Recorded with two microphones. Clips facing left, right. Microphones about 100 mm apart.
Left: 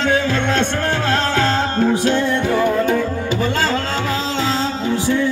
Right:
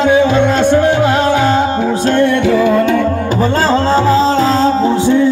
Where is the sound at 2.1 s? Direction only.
65° right (ahead or behind).